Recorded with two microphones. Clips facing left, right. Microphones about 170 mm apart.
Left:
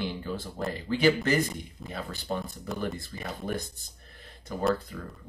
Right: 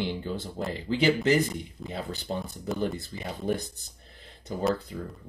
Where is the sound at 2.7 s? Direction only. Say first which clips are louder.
Right 5 dB; centre (ahead or behind).